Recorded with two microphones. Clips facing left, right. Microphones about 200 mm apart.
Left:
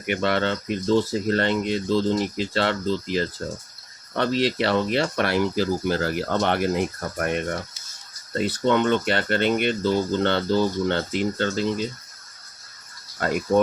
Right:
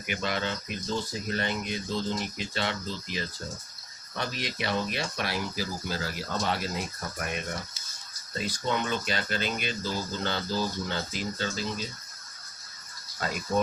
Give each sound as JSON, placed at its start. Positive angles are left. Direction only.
{"t": 0.0, "sound": "speech", "side_deg": 60}
{"t": 8.3, "sound": "speech", "side_deg": 65}
{"t": 13.1, "sound": "speech", "side_deg": 60}